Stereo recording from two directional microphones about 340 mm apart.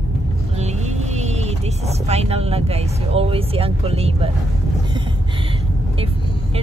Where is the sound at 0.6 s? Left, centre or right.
Centre.